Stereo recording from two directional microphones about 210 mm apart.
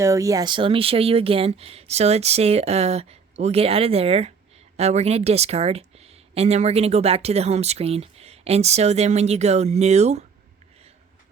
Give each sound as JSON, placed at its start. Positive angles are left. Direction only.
{"t": 0.0, "sound": "speech", "side_deg": -15}